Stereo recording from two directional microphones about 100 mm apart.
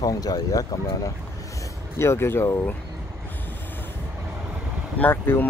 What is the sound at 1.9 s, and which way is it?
Speech, 25° left (ahead or behind).